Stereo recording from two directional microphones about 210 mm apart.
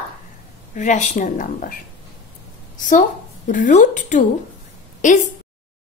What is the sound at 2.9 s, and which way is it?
A woman's voice, 35° left (ahead or behind).